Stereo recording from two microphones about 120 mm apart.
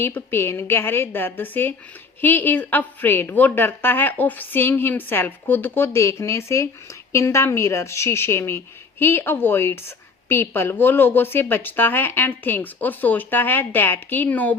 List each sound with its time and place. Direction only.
0.0 s a woman's voice: 20° left (ahead or behind)